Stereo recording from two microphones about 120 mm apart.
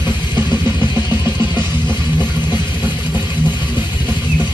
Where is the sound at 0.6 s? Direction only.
40° left (ahead or behind).